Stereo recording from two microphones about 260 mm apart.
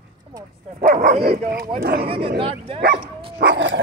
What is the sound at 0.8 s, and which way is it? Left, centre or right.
Speech, right.